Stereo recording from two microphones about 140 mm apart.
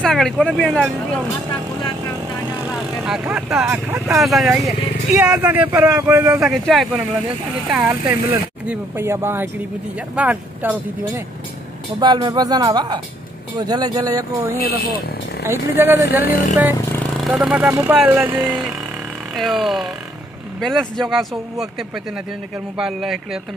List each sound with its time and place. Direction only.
0.0 s speech: centre (ahead or behind)
3.1 s speech: 5° right (ahead or behind)
6.4 s speech: centre (ahead or behind)
7.7 s speech: 10° right (ahead or behind)
12.0 s speech: 30° right (ahead or behind)
15.4 s speech: 15° right (ahead or behind)
17.2 s speech: 5° right (ahead or behind)
19.3 s speech: centre (ahead or behind)